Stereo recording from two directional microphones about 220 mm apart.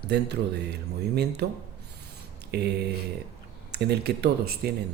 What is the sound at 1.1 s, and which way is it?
Speech, 50° right (ahead or behind).